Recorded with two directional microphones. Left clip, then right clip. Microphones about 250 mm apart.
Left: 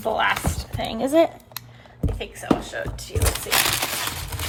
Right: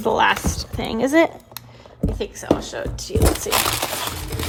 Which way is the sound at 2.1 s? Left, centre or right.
Right.